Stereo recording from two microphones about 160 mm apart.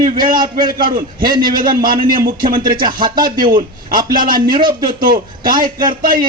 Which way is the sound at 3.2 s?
60° right (ahead or behind).